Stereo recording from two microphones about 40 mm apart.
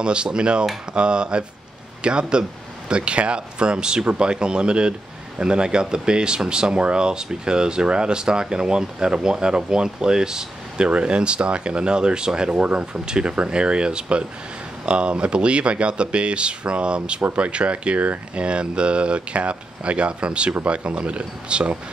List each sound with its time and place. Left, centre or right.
0.0 s speech: right
10.9 s speech: right